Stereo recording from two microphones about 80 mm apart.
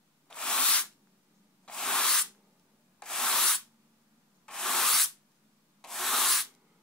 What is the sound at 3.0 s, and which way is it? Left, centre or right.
Rub, centre.